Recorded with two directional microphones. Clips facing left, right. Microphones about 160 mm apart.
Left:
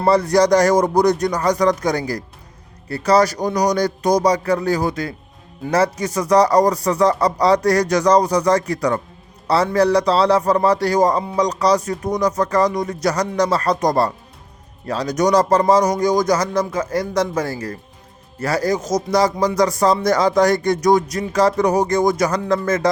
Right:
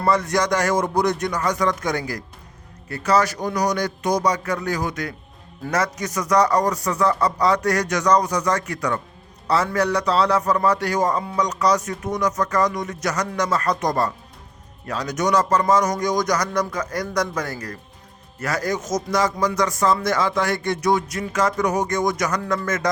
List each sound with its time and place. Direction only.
0.0 s a man's voice: 35° left (ahead or behind)